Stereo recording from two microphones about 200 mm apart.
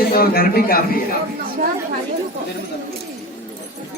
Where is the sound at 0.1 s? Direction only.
50° left (ahead or behind).